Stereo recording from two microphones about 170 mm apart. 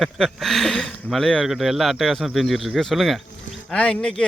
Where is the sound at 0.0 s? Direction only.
Centre (ahead or behind).